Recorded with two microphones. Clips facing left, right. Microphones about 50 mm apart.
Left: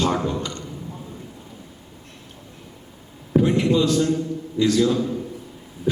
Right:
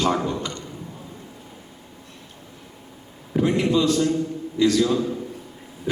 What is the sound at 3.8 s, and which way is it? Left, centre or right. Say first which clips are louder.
A man's voice: even; right.